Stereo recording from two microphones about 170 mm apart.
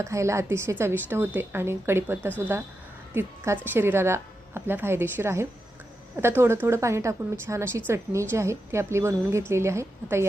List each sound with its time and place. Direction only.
0.0 s a woman's voice: 15° right (ahead or behind)